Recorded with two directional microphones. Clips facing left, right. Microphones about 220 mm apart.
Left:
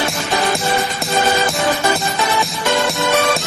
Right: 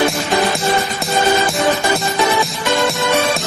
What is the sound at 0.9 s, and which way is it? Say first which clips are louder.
Music: right 2 dB; centre (ahead or behind).